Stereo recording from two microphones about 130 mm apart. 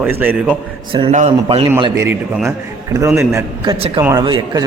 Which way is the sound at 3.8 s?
50° right (ahead or behind).